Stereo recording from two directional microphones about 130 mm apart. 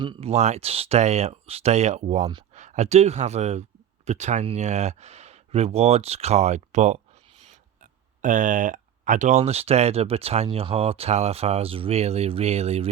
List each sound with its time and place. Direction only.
0.0 s speech: 35° right (ahead or behind)
0.3 s speech: 60° right (ahead or behind)
8.2 s speech: 80° right; by 12.9 s 55° right (ahead or behind)